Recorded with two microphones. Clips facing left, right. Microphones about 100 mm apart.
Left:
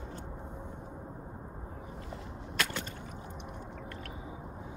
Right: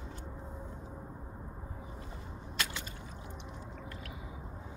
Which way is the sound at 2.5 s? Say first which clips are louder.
Left 4 dB; 55° left (ahead or behind).